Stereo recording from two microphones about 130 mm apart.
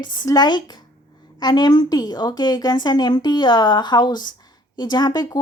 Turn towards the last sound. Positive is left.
turn(degrees=30)  # may be behind; listen again after turning